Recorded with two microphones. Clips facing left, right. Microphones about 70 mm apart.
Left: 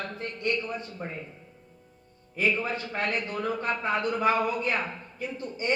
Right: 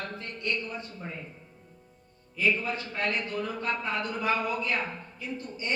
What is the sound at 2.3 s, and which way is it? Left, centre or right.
A man's voice, left.